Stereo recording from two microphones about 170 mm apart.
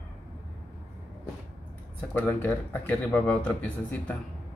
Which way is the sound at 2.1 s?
10° left (ahead or behind).